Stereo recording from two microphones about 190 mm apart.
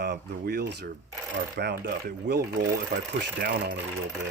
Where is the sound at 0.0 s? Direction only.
60° right (ahead or behind).